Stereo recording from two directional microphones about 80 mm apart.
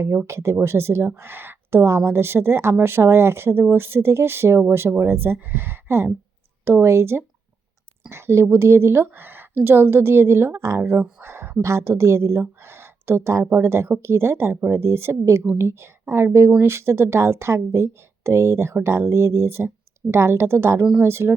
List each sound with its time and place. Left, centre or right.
0.3 s speech: right
11.2 s a sound: right
11.6 s speech: right